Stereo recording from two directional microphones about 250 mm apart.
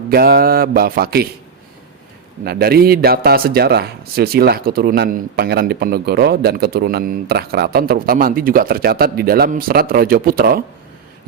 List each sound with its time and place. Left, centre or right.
0.1 s speech: right
2.4 s speech: right